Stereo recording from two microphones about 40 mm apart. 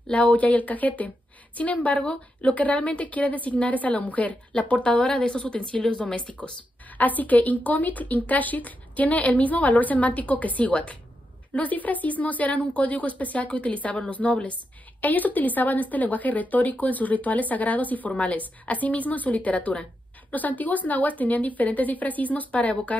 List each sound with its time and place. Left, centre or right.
0.1 s speech: left
7.0 s a woman's voice: left